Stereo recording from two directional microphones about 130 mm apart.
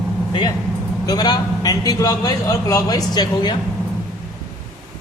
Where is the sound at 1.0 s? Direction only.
30° left (ahead or behind).